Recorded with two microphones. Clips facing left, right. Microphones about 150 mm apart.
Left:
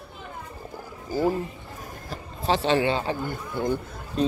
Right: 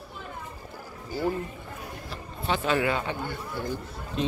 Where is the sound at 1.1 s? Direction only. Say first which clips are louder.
Left 4 dB; 40° left (ahead or behind).